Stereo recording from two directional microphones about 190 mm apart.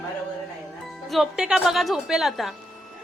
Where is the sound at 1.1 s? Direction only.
Centre (ahead or behind).